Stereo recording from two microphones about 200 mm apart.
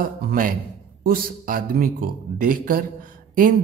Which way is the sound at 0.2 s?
45° right (ahead or behind).